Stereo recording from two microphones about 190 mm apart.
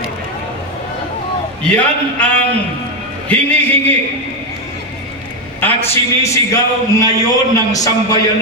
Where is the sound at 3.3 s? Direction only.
10° left (ahead or behind).